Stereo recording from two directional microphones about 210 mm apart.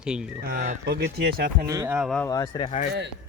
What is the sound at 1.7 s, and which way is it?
Speech, 15° right (ahead or behind).